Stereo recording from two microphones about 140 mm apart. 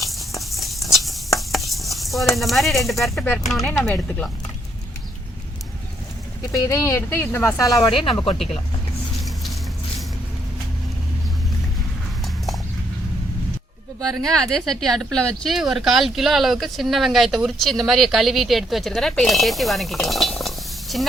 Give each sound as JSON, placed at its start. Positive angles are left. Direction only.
{"t": 0.0, "sound": "a sound", "side_deg": 0}
{"t": 0.9, "sound": "stir", "side_deg": 0}
{"t": 2.3, "sound": "speech", "side_deg": 0}
{"t": 6.4, "sound": "speech", "side_deg": 25}
{"t": 7.9, "sound": "speech", "side_deg": 40}
{"t": 14.0, "sound": "speech", "side_deg": 5}